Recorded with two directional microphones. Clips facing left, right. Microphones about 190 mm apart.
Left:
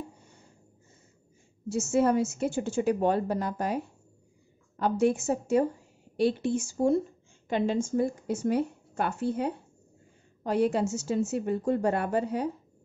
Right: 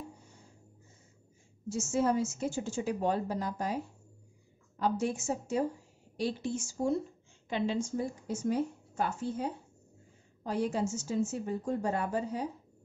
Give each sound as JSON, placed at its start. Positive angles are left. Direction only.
{"t": 1.7, "sound": "a woman's voice", "side_deg": 65}
{"t": 7.4, "sound": "a woman's voice", "side_deg": 50}